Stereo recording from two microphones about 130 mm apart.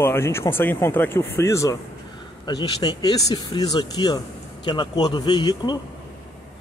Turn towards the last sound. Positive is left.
turn(degrees=35)  # may be behind; listen again after turning